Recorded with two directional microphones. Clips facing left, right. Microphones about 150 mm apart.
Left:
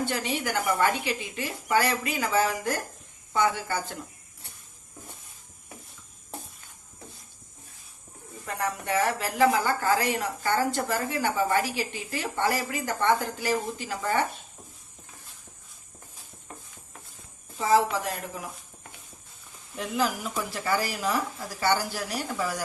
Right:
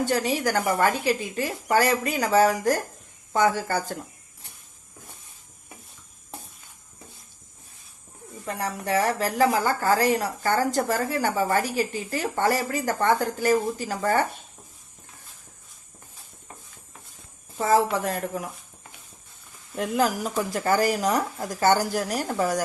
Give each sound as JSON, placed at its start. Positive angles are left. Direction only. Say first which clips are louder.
{"t": 0.0, "sound": "a woman's voice", "louder": "right 5 dB", "side_deg": -40}
{"t": 8.4, "sound": "a woman's voice", "louder": "right 2 dB", "side_deg": -30}
{"t": 19.7, "sound": "speech", "louder": "right 4 dB", "side_deg": -45}